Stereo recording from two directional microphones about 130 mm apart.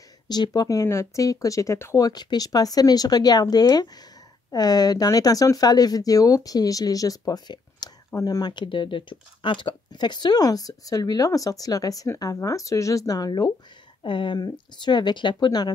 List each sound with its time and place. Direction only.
0.3 s speech: 30° left (ahead or behind)